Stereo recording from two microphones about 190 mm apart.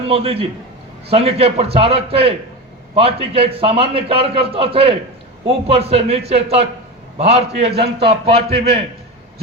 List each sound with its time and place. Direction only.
0.1 s a man's voice: 30° right (ahead or behind)